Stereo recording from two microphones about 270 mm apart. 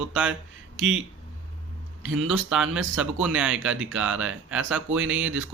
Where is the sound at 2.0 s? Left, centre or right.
Right.